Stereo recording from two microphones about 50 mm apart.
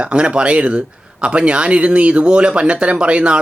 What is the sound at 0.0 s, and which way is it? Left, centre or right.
Speech, right.